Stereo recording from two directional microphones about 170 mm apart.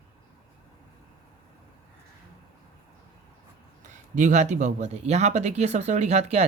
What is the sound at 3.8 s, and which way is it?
Speech, 45° right (ahead or behind).